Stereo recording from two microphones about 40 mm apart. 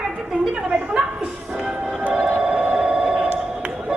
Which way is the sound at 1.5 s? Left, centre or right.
Right.